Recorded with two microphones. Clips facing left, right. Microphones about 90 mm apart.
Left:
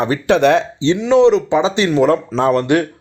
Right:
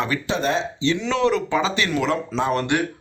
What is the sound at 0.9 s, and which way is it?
Speech, 20° left (ahead or behind).